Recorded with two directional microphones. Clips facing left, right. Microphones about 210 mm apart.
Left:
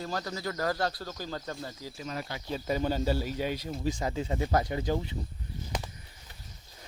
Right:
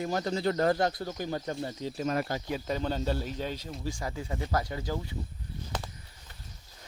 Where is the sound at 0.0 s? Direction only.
20° right (ahead or behind).